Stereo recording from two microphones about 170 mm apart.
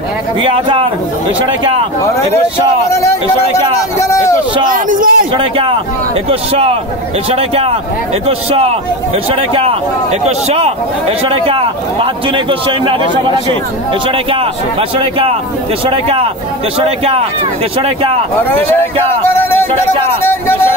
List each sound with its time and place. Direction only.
0.4 s a man's voice: 30° right (ahead or behind)
2.9 s a man's voice: 15° left (ahead or behind)
4.6 s a man's voice: 50° right (ahead or behind)
5.3 s a man's voice: 30° right (ahead or behind)
14.3 s a man's voice: 30° right (ahead or behind)
18.5 s a man's voice: 10° left (ahead or behind)
19.2 s music: 15° left (ahead or behind)
20.2 s a sound: 10° left (ahead or behind)